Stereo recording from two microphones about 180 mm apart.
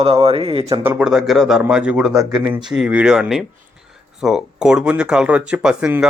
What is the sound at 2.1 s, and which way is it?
Speech, 20° right (ahead or behind).